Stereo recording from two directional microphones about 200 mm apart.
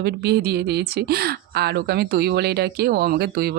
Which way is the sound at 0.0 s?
55° right (ahead or behind).